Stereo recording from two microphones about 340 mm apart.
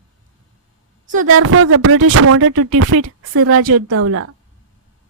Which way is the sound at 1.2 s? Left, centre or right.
Right.